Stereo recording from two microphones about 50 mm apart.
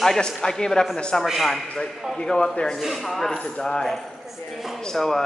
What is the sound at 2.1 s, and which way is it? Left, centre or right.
Speech, centre.